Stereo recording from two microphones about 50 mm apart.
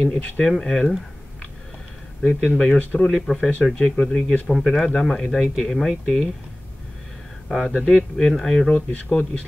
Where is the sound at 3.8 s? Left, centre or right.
Left.